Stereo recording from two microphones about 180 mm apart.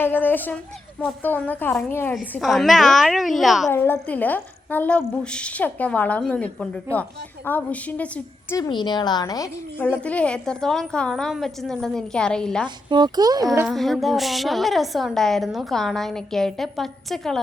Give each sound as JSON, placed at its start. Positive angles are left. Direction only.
{"t": 0.0, "sound": "a woman's voice", "side_deg": 10}
{"t": 2.4, "sound": "a woman's voice", "side_deg": 0}
{"t": 3.7, "sound": "a woman's voice", "side_deg": 10}
{"t": 8.5, "sound": "a woman's voice", "side_deg": 20}
{"t": 12.6, "sound": "speech", "side_deg": -25}
{"t": 13.7, "sound": "a woman's voice", "side_deg": 0}